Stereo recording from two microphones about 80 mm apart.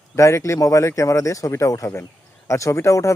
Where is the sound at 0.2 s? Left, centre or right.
Left.